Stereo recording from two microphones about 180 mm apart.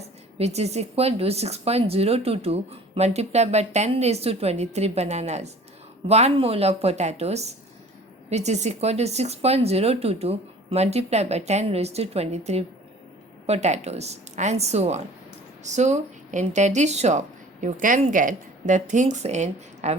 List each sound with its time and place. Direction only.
0.3 s speech: 35° right (ahead or behind)